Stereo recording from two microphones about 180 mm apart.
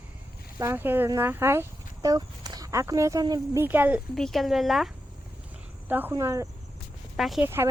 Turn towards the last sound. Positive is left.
turn(degrees=-15)  # may be behind; listen again after turning